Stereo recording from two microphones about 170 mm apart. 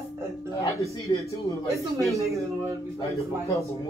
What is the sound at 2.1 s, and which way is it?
Speech, 20° right (ahead or behind).